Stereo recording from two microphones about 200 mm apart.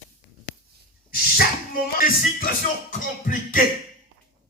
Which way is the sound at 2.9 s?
40° left (ahead or behind).